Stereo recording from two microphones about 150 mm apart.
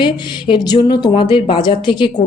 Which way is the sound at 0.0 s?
30° left (ahead or behind).